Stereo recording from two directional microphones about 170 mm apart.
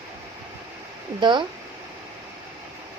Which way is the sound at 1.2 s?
25° right (ahead or behind).